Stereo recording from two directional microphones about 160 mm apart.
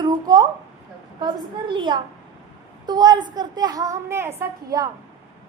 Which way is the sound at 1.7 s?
30° right (ahead or behind).